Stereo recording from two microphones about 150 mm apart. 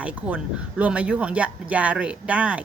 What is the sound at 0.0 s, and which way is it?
Speech, 10° right (ahead or behind).